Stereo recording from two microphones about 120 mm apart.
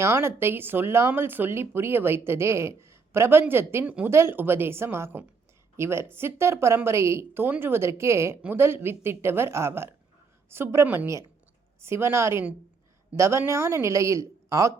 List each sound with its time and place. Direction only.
0.0 s speech: 20° right (ahead or behind)